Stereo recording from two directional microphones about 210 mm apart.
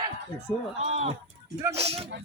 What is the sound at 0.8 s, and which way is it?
Speech, 30° right (ahead or behind).